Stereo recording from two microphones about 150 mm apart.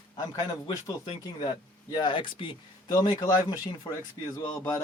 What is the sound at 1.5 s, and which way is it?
Speech, 30° left (ahead or behind).